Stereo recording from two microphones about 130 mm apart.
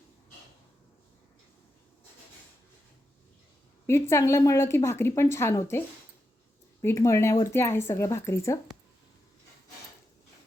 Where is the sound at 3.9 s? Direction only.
20° left (ahead or behind).